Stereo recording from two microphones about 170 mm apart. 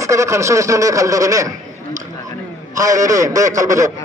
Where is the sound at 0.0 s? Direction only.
15° right (ahead or behind).